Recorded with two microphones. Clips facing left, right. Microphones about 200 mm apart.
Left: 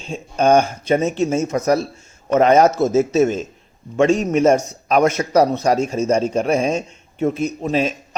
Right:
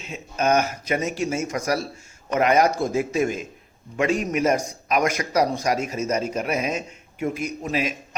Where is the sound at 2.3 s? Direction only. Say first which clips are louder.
Left 6 dB; 25° left (ahead or behind).